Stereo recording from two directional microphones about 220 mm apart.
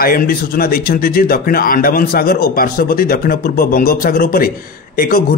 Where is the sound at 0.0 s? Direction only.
40° left (ahead or behind).